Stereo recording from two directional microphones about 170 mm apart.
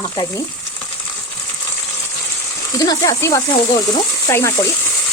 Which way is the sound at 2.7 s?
20° left (ahead or behind).